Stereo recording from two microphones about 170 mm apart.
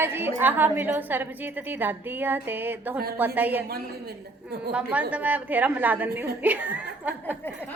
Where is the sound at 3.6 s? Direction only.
70° right (ahead or behind).